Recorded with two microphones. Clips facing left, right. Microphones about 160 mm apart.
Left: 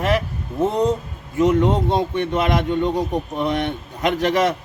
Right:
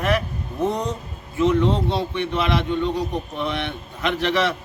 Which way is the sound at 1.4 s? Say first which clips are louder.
Left 2 dB; 45° left (ahead or behind).